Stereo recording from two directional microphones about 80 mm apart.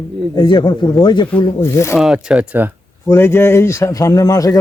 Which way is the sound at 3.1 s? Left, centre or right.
Left.